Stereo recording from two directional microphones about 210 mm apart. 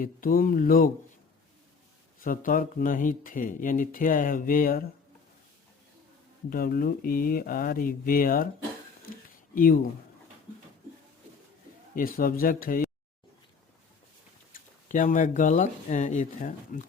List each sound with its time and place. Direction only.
0.0 s speech: 40° left (ahead or behind)
2.2 s speech: 40° left (ahead or behind)
6.5 s speech: 45° left (ahead or behind)
9.6 s speech: 45° left (ahead or behind)
11.9 s speech: 40° left (ahead or behind)
14.8 s speech: 40° left (ahead or behind)